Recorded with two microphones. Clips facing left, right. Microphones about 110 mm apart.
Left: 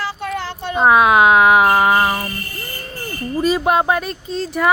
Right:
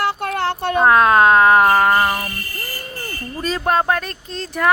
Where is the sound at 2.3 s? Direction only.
25° left (ahead or behind).